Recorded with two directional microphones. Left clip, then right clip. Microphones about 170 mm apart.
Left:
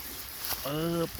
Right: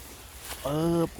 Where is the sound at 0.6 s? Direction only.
35° right (ahead or behind).